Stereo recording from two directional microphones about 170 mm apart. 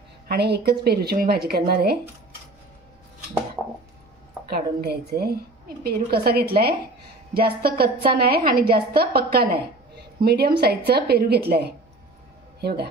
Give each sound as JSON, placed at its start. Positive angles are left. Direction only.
{"t": 0.3, "sound": "speech", "side_deg": -75}
{"t": 3.6, "sound": "a sound", "side_deg": -5}
{"t": 4.5, "sound": "a woman's voice", "side_deg": -65}